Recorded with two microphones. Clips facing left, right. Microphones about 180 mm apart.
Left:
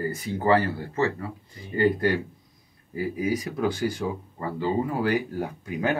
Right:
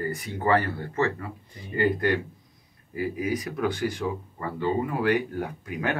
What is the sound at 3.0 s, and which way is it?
Speech, 30° left (ahead or behind).